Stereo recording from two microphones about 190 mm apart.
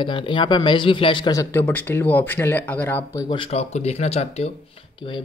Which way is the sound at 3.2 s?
25° left (ahead or behind).